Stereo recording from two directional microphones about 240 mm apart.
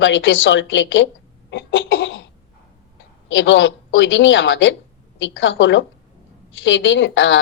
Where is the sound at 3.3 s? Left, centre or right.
Left.